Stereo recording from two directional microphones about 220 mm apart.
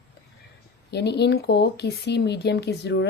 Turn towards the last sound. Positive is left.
turn(degrees=50)  # may be behind; listen again after turning